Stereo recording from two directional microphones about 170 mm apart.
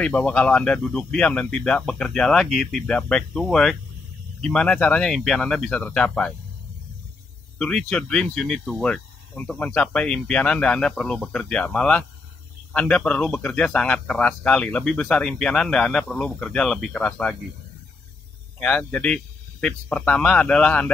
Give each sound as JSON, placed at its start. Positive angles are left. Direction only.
{"t": 0.0, "sound": "speech", "side_deg": 5}
{"t": 7.5, "sound": "speech", "side_deg": 5}
{"t": 18.6, "sound": "speech", "side_deg": 5}